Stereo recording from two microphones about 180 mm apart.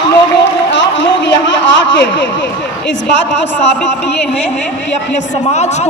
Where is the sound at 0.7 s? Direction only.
90° left.